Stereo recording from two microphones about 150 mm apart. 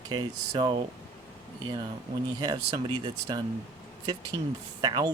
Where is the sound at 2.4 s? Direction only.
25° right (ahead or behind).